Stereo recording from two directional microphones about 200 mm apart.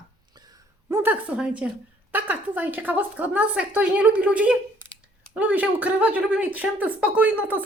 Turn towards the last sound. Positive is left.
turn(degrees=-10)  # may be behind; listen again after turning